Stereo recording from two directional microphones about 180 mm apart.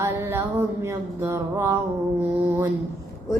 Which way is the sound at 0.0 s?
15° right (ahead or behind).